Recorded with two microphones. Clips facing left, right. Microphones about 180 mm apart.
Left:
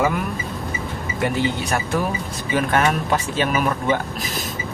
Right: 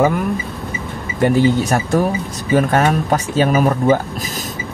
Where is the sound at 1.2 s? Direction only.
45° right (ahead or behind).